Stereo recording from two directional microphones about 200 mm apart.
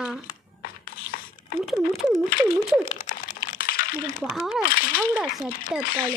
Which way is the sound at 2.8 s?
35° left (ahead or behind).